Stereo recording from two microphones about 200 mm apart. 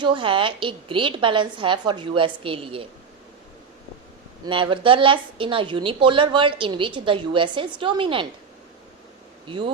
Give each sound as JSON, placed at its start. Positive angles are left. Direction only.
{"t": 0.0, "sound": "a woman's voice", "side_deg": -25}
{"t": 4.4, "sound": "a woman's voice", "side_deg": -25}
{"t": 9.5, "sound": "a woman's voice", "side_deg": -25}